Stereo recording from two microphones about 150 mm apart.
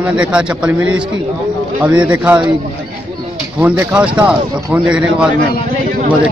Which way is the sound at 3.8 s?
10° right (ahead or behind).